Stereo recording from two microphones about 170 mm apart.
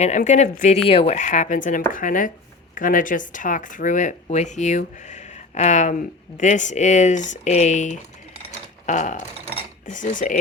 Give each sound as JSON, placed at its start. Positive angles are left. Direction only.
{"t": 0.0, "sound": "a woman's voice", "side_deg": 45}